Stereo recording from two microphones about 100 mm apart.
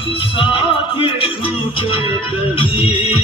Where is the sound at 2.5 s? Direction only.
60° left (ahead or behind).